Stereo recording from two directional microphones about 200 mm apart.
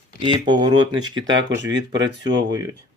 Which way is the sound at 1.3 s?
65° right (ahead or behind).